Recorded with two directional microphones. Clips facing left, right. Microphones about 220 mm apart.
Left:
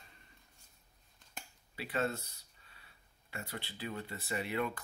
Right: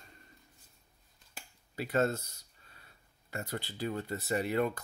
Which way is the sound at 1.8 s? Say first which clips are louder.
Right 6 dB; 45° right (ahead or behind).